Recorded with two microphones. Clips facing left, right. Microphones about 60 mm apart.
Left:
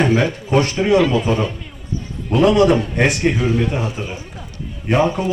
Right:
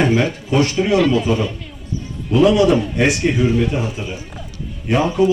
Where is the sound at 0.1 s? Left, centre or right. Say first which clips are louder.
Left 1 dB; left.